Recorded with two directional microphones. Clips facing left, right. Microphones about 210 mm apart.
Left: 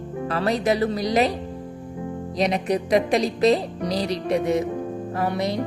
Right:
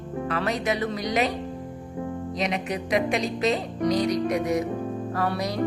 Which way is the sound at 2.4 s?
35° left (ahead or behind).